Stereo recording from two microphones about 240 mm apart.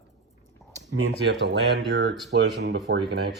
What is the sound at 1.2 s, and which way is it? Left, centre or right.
Speech, right.